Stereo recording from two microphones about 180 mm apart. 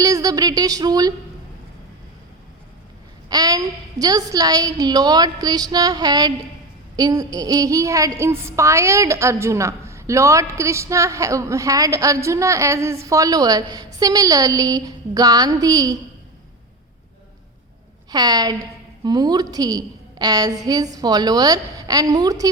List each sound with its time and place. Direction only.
0.0 s speech: 20° right (ahead or behind)
3.2 s a woman's voice: 20° right (ahead or behind)
18.1 s a woman's voice: 20° right (ahead or behind)